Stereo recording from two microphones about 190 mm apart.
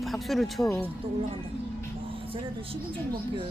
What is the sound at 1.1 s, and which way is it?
Speech, 30° right (ahead or behind).